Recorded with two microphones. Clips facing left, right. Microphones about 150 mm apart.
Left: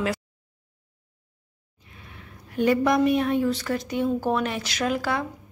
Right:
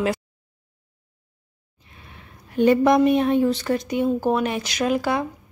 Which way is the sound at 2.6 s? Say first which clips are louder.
Right 4 dB; 25° right (ahead or behind).